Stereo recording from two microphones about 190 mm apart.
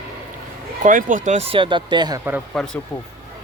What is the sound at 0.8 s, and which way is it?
Speech, 45° right (ahead or behind).